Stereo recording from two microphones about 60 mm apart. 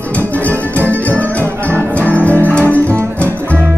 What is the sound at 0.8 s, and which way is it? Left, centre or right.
Music, left.